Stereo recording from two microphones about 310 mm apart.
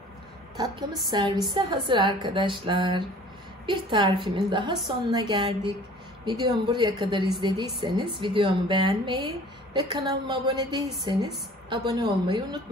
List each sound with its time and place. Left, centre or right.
1.1 s a woman's voice: centre